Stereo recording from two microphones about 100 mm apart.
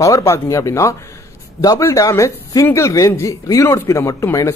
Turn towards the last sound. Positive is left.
turn(degrees=30)  # may be behind; listen again after turning